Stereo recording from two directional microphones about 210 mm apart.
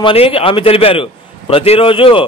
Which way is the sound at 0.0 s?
25° left (ahead or behind).